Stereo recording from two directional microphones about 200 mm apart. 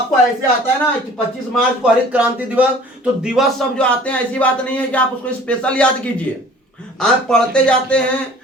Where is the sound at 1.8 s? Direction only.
5° right (ahead or behind).